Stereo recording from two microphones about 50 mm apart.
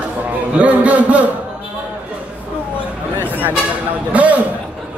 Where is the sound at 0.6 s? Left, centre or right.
Right.